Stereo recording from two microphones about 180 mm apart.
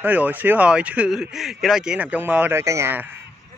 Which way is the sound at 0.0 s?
10° right (ahead or behind).